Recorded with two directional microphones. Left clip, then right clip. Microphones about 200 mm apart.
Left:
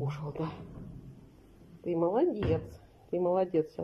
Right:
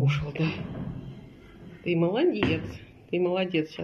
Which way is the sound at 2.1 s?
15° left (ahead or behind).